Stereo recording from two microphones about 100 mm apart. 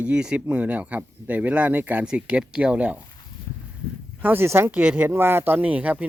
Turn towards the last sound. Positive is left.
turn(degrees=-15)  # may be behind; listen again after turning